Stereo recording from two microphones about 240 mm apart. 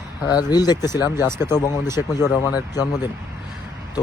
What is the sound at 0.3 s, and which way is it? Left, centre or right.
Speech, centre.